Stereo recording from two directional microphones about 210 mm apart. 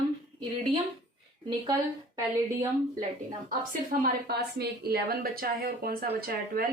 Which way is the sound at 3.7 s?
45° right (ahead or behind).